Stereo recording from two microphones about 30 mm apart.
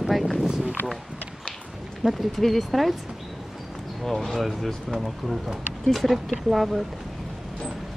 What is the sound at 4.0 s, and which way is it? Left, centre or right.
Speech, centre.